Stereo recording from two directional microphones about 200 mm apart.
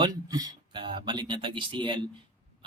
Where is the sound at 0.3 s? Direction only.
20° right (ahead or behind).